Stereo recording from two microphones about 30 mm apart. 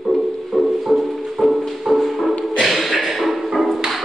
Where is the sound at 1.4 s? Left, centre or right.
Centre.